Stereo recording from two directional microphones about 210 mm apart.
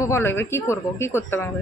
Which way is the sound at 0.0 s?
10° left (ahead or behind).